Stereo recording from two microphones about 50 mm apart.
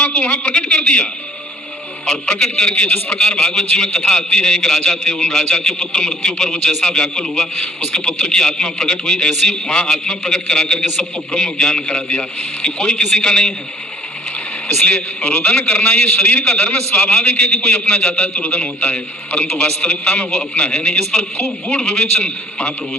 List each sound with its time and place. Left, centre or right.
0.0 s a sound: left
2.0 s a man's voice: centre
14.8 s a man's voice: left